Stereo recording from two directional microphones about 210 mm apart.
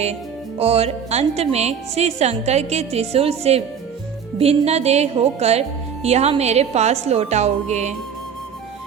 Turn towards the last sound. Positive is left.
turn(degrees=-35)  # may be behind; listen again after turning